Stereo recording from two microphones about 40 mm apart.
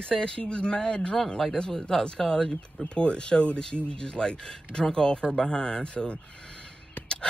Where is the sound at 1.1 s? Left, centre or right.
Centre; by 6.2 s left.